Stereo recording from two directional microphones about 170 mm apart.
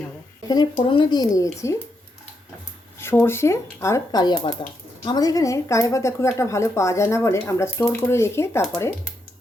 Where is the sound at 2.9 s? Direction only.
15° left (ahead or behind).